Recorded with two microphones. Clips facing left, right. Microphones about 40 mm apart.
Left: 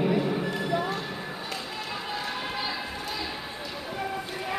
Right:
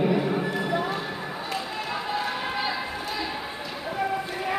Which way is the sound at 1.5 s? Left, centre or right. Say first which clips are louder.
Right 6 dB; centre.